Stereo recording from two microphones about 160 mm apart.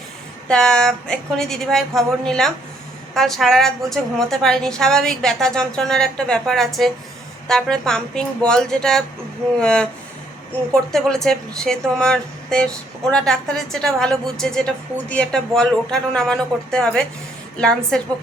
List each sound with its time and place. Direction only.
0.4 s speech: 5° left (ahead or behind)
10.9 s speech: 5° left (ahead or behind)